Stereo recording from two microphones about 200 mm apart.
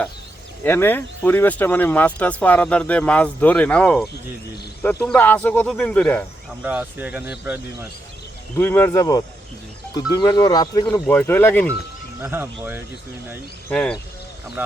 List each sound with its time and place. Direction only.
0.6 s speech: 10° left (ahead or behind)
6.6 s speech: 5° right (ahead or behind)
8.5 s speech: 10° left (ahead or behind)
11.0 s speech: 10° left (ahead or behind)
12.2 s speech: 10° right (ahead or behind)
13.7 s speech: 5° left (ahead or behind)